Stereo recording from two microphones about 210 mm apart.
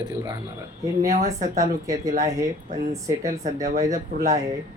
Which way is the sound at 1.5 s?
15° right (ahead or behind).